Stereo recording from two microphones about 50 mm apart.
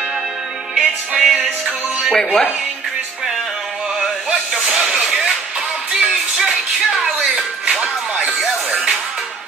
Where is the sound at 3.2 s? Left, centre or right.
Centre.